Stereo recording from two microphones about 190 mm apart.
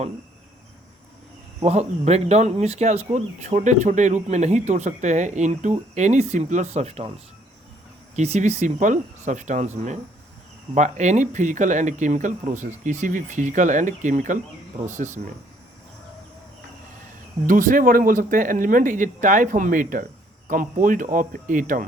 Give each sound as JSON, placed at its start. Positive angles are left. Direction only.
{"t": 1.6, "sound": "speech", "side_deg": -35}
{"t": 8.1, "sound": "speech", "side_deg": -35}
{"t": 17.4, "sound": "speech", "side_deg": -45}